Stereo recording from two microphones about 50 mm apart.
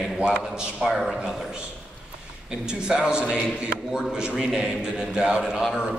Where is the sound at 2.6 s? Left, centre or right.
Centre.